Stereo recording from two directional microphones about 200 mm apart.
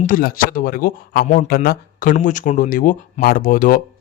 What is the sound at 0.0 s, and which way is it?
Speech, 45° left (ahead or behind).